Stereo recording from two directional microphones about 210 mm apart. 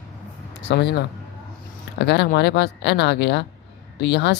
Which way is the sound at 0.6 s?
55° left (ahead or behind).